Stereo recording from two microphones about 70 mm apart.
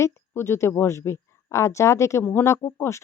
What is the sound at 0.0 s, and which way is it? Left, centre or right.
Speech, left.